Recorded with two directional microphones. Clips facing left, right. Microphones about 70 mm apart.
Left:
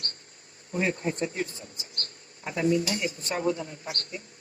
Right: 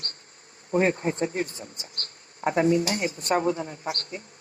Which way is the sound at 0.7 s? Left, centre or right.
Right.